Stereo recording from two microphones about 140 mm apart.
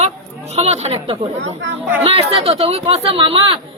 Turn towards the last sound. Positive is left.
turn(degrees=-40)  # may be behind; listen again after turning